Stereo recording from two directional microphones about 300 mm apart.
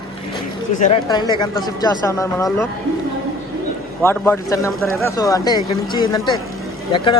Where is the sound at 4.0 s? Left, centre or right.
Centre.